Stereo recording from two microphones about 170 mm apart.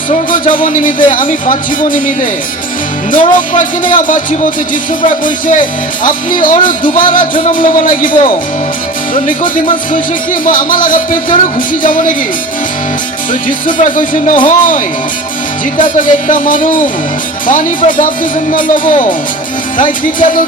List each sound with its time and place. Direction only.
0.1 s speech: 50° left (ahead or behind)
3.1 s speech: 50° left (ahead or behind)
9.2 s speech: 50° left (ahead or behind)
13.7 s speech: 50° left (ahead or behind)
15.8 s speech: 50° left (ahead or behind)